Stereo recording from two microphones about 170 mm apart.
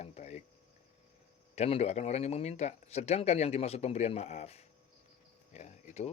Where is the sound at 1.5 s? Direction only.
40° left (ahead or behind).